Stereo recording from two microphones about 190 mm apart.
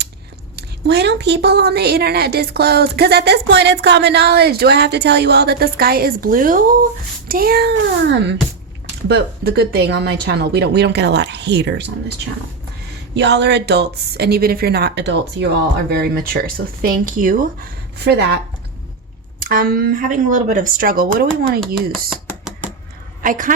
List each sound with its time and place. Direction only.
0.5 s a woman's voice: 60° right (ahead or behind)
9.0 s a woman's voice: 55° right (ahead or behind)
13.1 s a woman's voice: 65° right (ahead or behind)
19.4 s speech: 50° right (ahead or behind)
23.2 s a woman's voice: 45° right (ahead or behind)